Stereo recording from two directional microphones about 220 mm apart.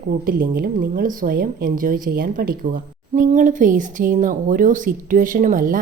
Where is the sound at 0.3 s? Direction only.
40° right (ahead or behind).